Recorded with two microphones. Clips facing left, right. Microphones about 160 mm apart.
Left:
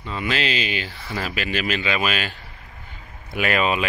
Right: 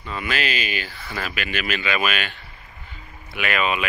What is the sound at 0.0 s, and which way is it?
Speech, 25° left (ahead or behind).